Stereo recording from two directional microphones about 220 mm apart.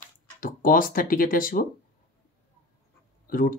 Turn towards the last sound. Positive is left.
turn(degrees=40)  # may be behind; listen again after turning